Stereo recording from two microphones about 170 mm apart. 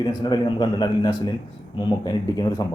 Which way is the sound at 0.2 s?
25° left (ahead or behind).